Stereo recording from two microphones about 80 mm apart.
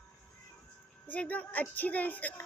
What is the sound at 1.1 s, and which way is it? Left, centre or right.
A woman's voice, centre.